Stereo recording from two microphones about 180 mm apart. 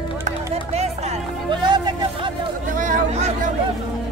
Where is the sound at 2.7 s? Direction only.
45° right (ahead or behind).